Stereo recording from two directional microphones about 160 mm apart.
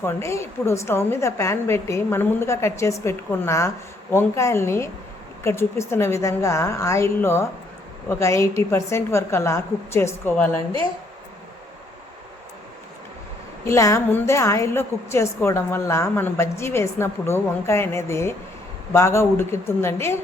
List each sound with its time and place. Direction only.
0.0 s a woman's voice: 15° left (ahead or behind)
13.7 s a woman's voice: 20° left (ahead or behind)